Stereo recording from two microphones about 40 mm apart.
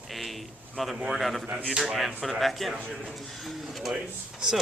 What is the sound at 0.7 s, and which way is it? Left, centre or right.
Speech, centre.